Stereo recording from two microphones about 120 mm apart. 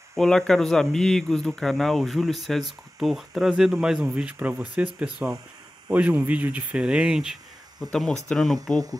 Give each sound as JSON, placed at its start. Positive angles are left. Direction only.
{"t": 0.1, "sound": "speech", "side_deg": 5}